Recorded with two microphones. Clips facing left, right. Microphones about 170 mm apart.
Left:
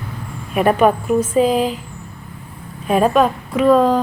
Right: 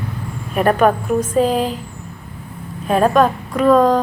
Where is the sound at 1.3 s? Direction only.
10° left (ahead or behind).